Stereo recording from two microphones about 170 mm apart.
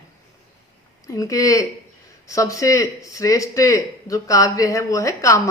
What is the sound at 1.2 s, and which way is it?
A woman's voice, 20° left (ahead or behind).